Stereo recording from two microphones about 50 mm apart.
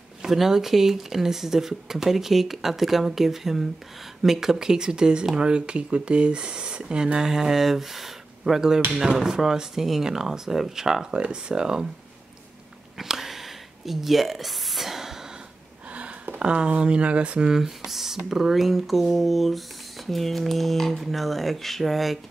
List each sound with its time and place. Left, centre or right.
0.2 s speech: centre
11.1 s speech: right
12.9 s a sound: centre
15.9 s speech: right
17.5 s speech: centre